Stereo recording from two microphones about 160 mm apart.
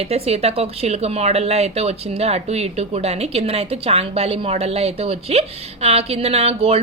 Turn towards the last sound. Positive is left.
turn(degrees=-40)  # may be behind; listen again after turning